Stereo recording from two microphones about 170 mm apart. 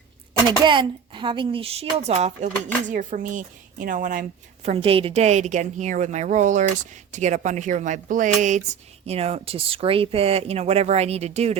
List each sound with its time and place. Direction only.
0.6 s a woman's voice: 30° right (ahead or behind)